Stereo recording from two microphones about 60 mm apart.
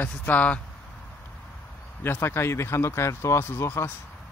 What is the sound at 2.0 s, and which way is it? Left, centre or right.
Speech, left.